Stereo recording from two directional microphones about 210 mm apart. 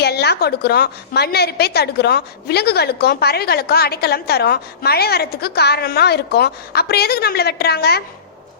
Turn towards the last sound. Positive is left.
turn(degrees=50)  # may be behind; listen again after turning